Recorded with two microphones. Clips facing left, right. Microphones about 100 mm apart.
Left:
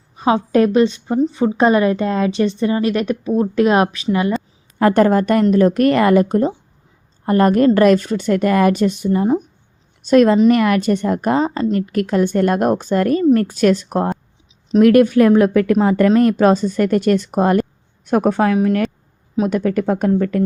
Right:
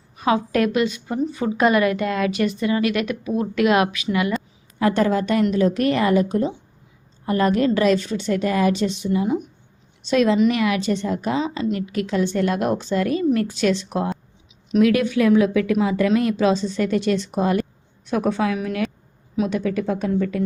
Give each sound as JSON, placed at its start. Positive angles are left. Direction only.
{"t": 0.2, "sound": "a woman's voice", "side_deg": 30}
{"t": 4.8, "sound": "a woman's voice", "side_deg": 50}